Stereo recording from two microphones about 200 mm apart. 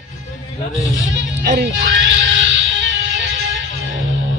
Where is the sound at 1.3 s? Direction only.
60° right (ahead or behind).